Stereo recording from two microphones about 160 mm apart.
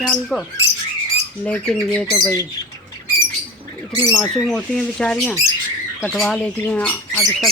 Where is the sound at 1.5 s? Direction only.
5° left (ahead or behind).